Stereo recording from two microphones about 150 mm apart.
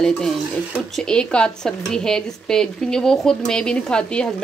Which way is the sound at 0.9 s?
5° left (ahead or behind).